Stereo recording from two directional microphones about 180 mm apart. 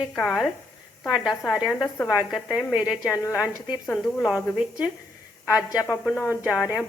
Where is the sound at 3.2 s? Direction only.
15° left (ahead or behind).